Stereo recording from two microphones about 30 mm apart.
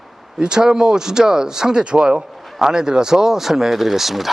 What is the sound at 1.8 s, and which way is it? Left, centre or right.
Speech, right.